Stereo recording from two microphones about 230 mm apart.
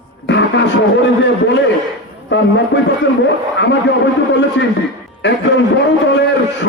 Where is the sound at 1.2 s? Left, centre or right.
Left.